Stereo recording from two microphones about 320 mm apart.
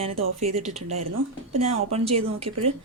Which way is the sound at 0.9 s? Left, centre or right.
Right.